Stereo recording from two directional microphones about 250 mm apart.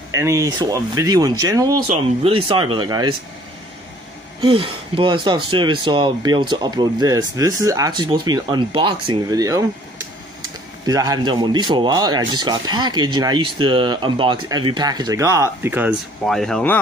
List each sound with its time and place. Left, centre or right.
0.1 s speech: centre
4.4 s speech: right
10.9 s speech: centre